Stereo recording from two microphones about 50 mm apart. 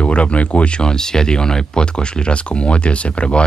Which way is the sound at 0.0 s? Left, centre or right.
Left.